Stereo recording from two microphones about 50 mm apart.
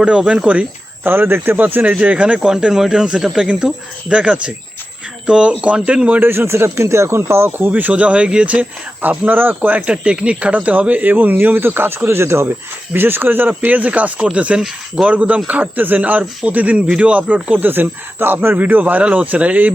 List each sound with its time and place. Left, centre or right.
0.0 s speech: right
1.0 s speech: right
2.4 s speech: centre
6.1 s speech: right
7.7 s speech: right
9.0 s speech: right
9.9 s speech: right
12.9 s speech: right